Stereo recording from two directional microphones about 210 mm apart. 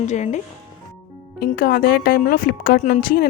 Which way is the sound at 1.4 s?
45° left (ahead or behind).